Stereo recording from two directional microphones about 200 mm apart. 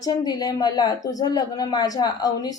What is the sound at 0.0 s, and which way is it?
Speech, 20° left (ahead or behind).